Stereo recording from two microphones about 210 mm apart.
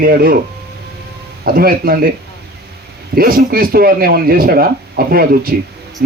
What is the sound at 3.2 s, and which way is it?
Speech, 45° right (ahead or behind).